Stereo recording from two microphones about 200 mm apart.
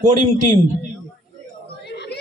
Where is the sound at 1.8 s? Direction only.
55° left (ahead or behind).